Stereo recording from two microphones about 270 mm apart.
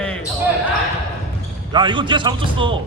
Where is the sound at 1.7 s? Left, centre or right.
Centre.